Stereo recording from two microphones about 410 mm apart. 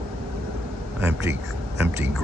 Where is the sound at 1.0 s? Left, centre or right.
Centre.